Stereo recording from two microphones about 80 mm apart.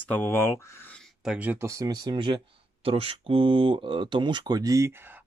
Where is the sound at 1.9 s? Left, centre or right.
Right.